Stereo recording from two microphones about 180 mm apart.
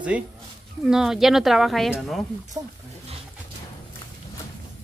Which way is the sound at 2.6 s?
15° right (ahead or behind).